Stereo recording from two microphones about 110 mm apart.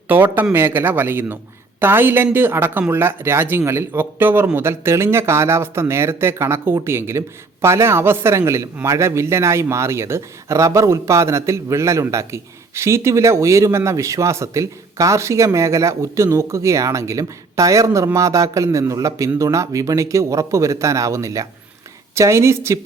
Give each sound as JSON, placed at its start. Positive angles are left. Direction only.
{"t": 0.1, "sound": "speech", "side_deg": -15}